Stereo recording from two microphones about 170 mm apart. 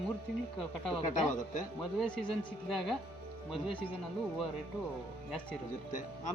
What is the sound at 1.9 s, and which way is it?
Speech, 5° left (ahead or behind).